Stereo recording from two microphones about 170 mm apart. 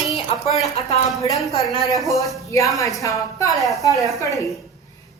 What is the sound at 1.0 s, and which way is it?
Speech, 20° left (ahead or behind).